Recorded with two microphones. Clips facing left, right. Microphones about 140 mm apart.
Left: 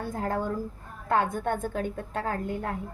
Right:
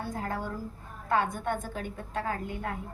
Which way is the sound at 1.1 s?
50° left (ahead or behind).